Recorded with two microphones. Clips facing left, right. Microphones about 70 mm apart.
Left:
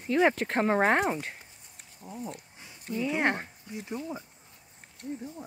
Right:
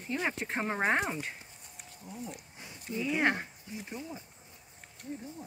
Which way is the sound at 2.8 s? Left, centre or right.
Left.